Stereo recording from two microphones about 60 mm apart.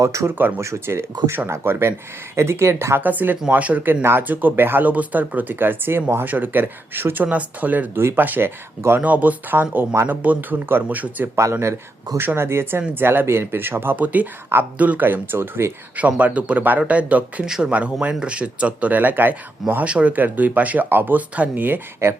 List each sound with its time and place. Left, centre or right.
0.0 s speech: right
0.3 s speech: right
0.6 s speech: right
3.0 s speech: right
7.9 s speech: right
9.0 s speech: right
12.1 s speech: right
13.9 s speech: right
16.0 s speech: right
17.4 s speech: centre
17.7 s speech: right
22.0 s speech: right